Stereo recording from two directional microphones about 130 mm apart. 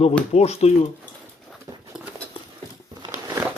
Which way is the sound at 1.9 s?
5° right (ahead or behind).